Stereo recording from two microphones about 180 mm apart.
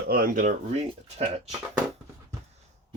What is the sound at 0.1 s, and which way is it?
Speech, 50° right (ahead or behind).